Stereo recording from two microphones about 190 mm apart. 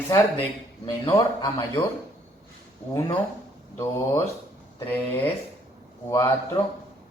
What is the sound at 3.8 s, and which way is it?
Speech, 15° left (ahead or behind).